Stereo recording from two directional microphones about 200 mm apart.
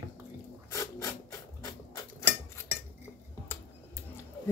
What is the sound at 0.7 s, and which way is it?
Rub, 15° left (ahead or behind).